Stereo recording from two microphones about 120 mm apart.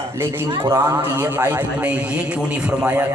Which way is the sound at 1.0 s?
15° right (ahead or behind).